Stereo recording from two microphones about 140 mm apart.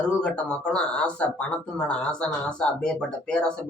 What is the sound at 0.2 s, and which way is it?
Speech, 5° left (ahead or behind).